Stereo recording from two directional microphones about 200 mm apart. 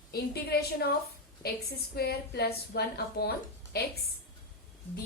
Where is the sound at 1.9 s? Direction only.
50° left (ahead or behind).